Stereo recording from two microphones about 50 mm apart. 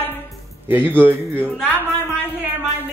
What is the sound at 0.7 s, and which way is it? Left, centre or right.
A man's voice, right.